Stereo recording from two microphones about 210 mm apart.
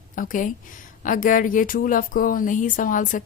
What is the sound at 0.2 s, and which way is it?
Speech, 40° left (ahead or behind).